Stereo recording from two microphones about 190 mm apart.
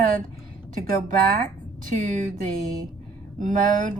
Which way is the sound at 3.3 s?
45° right (ahead or behind).